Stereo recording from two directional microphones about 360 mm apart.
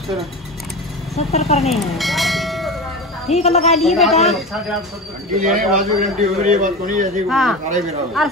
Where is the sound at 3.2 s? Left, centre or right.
Centre.